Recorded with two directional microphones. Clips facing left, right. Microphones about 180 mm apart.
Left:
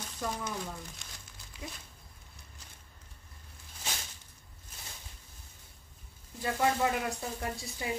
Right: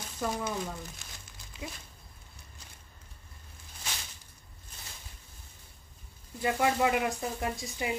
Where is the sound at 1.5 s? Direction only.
20° right (ahead or behind).